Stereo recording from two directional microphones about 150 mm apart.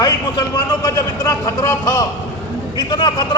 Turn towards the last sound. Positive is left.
turn(degrees=30)  # may be behind; listen again after turning